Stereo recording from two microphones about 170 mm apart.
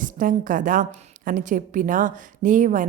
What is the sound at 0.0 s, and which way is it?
A woman's voice, 50° right (ahead or behind).